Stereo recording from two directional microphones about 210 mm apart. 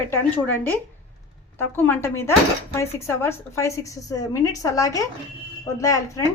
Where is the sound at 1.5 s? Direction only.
10° left (ahead or behind).